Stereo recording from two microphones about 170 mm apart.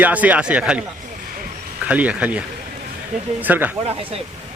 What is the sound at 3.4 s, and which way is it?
Speech, 10° right (ahead or behind).